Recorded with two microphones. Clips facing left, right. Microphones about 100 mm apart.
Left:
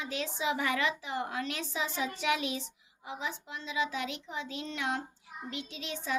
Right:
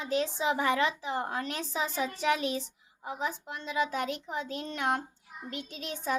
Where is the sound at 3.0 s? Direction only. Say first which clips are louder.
Right 4 dB; 45° right (ahead or behind).